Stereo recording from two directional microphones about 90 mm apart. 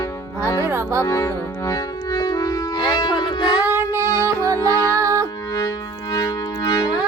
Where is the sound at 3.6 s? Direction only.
30° right (ahead or behind).